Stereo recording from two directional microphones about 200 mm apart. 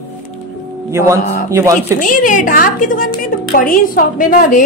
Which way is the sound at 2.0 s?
40° left (ahead or behind).